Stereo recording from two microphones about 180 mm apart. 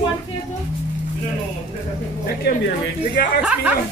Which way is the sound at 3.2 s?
65° left (ahead or behind).